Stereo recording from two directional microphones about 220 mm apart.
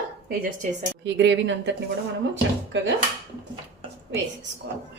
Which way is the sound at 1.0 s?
55° right (ahead or behind).